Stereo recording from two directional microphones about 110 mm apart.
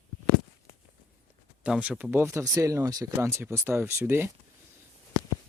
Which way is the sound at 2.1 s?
25° right (ahead or behind).